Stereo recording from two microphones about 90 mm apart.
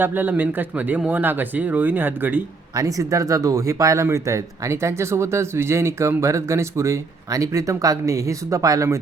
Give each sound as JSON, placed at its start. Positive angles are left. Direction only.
{"t": 0.0, "sound": "speech", "side_deg": -20}
{"t": 2.7, "sound": "speech", "side_deg": -40}